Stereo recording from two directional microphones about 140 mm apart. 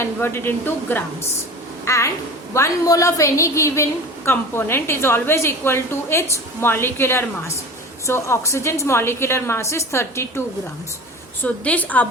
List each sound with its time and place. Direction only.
0.0 s a woman's voice: 15° left (ahead or behind)
11.4 s a woman's voice: 10° left (ahead or behind)